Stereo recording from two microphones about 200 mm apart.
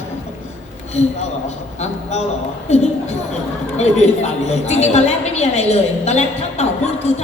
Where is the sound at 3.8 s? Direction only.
35° left (ahead or behind).